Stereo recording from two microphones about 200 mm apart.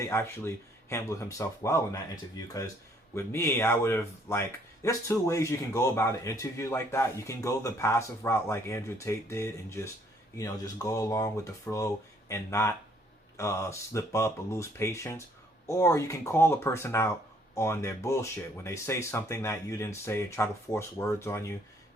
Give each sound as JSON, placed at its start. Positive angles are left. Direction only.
{"t": 0.0, "sound": "speech", "side_deg": 15}